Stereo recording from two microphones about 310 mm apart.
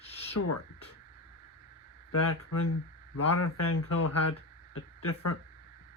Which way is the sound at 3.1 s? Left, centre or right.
Left.